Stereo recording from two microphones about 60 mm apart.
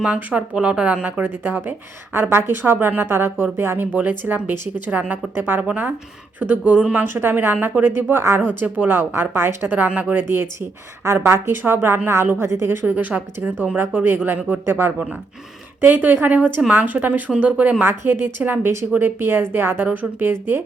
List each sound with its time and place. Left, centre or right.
0.0 s speech: right
4.9 s speech: right
8.1 s a woman's voice: right
8.4 s speech: right
9.6 s speech: right
11.0 s a woman's voice: right
12.5 s a woman's voice: right
12.8 s speech: right